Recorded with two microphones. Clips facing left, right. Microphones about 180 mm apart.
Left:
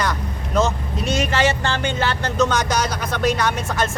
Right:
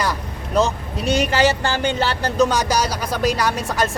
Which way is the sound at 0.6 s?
35° right (ahead or behind).